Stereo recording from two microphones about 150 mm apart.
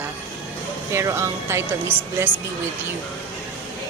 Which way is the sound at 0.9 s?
20° right (ahead or behind).